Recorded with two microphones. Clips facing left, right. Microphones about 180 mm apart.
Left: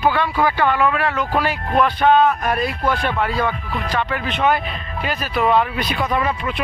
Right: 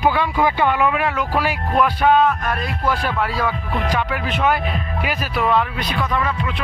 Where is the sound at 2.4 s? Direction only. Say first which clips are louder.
Left 4 dB; 10° left (ahead or behind).